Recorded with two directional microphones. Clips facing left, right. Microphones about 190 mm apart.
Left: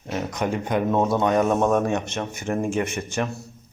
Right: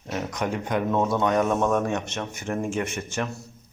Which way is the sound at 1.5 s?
30° left (ahead or behind).